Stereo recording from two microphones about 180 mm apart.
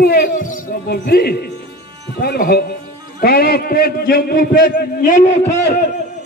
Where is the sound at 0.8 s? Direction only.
60° left (ahead or behind).